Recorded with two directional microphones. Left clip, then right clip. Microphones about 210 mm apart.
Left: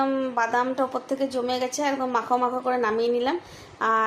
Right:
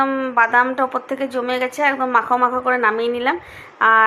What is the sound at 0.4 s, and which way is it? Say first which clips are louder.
A woman's voice: right 8 dB; 15° right (ahead or behind).